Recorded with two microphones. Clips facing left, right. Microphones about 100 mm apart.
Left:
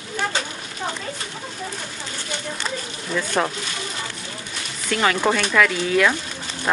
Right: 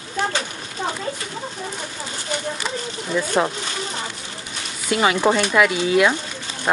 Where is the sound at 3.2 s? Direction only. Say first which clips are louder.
Right 2 dB; 10° right (ahead or behind).